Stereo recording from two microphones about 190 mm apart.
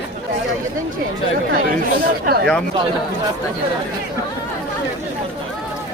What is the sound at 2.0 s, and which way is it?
Speech, 55° right (ahead or behind).